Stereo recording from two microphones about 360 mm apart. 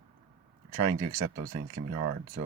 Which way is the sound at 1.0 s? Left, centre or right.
Centre.